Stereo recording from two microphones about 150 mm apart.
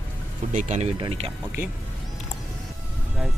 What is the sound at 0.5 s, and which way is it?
Speech, 50° right (ahead or behind).